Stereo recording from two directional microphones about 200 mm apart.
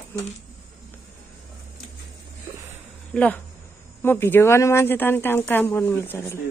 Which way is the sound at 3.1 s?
5° left (ahead or behind).